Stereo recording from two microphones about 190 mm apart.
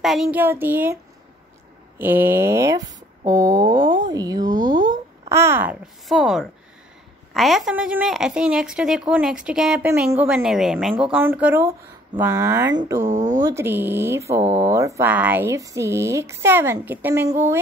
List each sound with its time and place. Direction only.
0.0 s speech: centre (ahead or behind)
2.0 s speech: 10° right (ahead or behind)
5.3 s a woman's voice: 15° right (ahead or behind)
13.0 s speech: 40° right (ahead or behind)
13.4 s speech: 15° right (ahead or behind)
14.4 s speech: 35° right (ahead or behind)
14.7 s speech: 15° right (ahead or behind)